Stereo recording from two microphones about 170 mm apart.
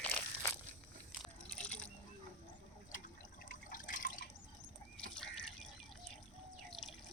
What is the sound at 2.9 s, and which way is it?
Water, 55° left (ahead or behind).